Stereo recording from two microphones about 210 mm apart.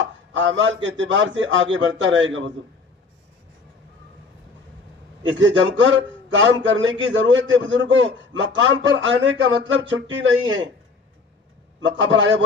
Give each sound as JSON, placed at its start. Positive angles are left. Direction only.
{"t": 0.3, "sound": "a man's voice", "side_deg": -60}
{"t": 5.4, "sound": "a man's voice", "side_deg": -65}
{"t": 11.8, "sound": "a man's voice", "side_deg": -60}